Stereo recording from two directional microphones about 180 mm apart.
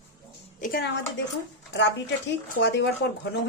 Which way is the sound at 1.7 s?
85° left.